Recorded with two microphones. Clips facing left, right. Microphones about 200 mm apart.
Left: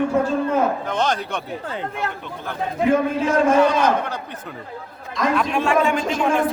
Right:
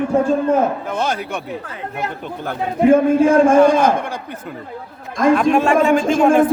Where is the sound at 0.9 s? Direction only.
10° right (ahead or behind).